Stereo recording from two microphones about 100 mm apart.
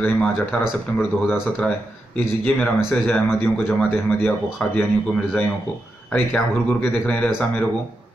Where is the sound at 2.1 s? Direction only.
15° left (ahead or behind).